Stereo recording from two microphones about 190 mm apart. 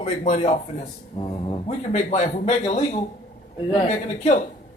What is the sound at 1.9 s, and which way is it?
Speech, 35° left (ahead or behind).